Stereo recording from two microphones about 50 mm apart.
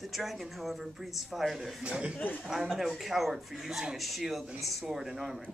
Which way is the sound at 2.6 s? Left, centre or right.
Centre.